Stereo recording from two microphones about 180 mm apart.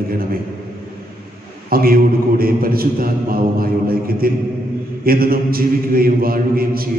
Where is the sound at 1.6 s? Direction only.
55° right (ahead or behind).